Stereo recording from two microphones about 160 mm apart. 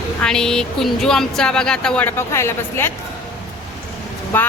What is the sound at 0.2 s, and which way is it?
Speech, 5° left (ahead or behind).